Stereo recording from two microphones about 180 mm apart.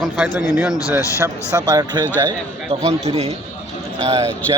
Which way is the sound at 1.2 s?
20° right (ahead or behind).